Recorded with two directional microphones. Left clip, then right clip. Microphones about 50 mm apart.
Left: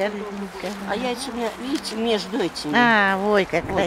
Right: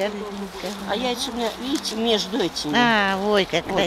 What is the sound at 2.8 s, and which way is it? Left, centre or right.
Speech, left.